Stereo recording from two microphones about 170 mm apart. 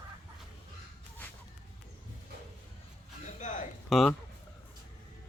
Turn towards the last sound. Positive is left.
turn(degrees=0)  # may be behind; listen again after turning